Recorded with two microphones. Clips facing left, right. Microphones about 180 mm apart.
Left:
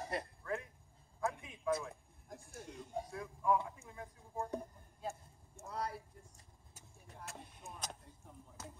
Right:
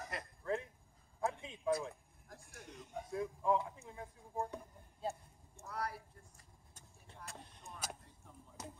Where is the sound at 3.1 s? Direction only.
25° right (ahead or behind).